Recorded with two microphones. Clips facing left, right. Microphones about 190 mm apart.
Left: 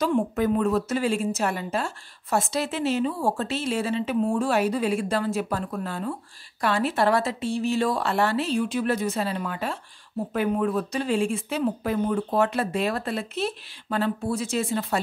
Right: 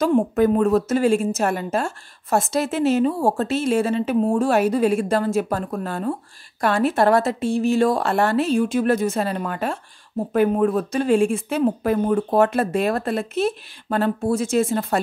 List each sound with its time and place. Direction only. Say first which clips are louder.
0.0 s a woman's voice: right 6 dB; 45° right (ahead or behind)